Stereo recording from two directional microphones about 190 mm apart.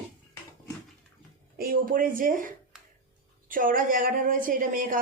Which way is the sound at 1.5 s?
50° right (ahead or behind).